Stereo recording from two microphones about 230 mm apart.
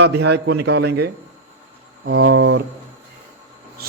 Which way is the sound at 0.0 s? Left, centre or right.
Right.